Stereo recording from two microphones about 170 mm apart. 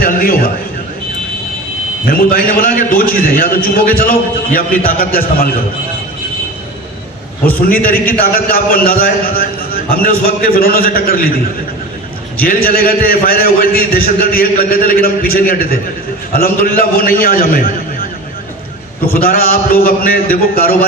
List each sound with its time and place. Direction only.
0.0 s a man's voice: 60° left (ahead or behind)
2.0 s a man's voice: 60° left (ahead or behind)
7.4 s a man's voice: 60° left (ahead or behind)
12.4 s a man's voice: 60° left (ahead or behind)
19.0 s a man's voice: 60° left (ahead or behind)